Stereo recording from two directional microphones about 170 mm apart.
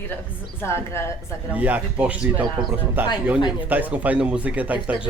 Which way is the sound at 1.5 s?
10° right (ahead or behind).